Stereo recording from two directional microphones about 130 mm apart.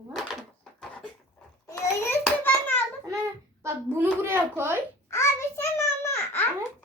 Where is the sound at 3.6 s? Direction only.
20° right (ahead or behind).